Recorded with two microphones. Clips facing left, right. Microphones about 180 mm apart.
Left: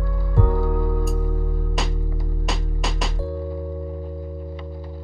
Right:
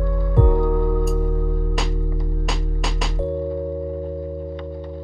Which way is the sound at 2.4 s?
Centre (ahead or behind).